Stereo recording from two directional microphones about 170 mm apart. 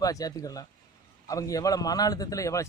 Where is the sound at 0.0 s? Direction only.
20° left (ahead or behind).